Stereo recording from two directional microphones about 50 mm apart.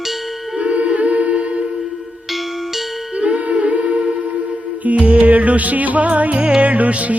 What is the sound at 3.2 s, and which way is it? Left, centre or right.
Humming, right.